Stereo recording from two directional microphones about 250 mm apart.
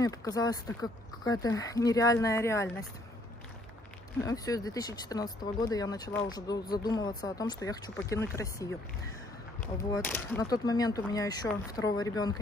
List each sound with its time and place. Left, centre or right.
0.0 s speech: centre
4.2 s speech: centre